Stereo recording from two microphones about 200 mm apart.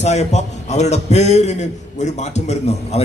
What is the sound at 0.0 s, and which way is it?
A man's voice, 35° left (ahead or behind).